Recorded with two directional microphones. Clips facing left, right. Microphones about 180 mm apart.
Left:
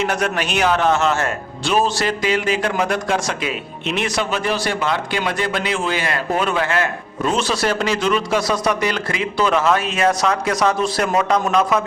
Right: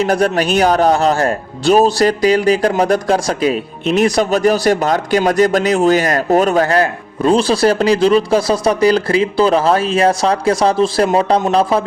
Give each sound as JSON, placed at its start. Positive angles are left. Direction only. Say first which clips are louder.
{"t": 0.0, "sound": "a man's voice", "louder": "right 7 dB", "side_deg": -35}